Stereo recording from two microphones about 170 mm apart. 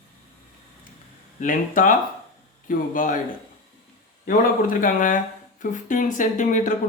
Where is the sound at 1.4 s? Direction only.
50° left (ahead or behind).